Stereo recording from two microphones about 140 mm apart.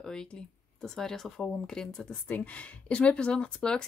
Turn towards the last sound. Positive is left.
turn(degrees=5)  # may be behind; listen again after turning